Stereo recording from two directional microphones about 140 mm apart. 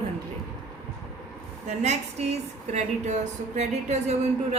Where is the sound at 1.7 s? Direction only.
55° right (ahead or behind).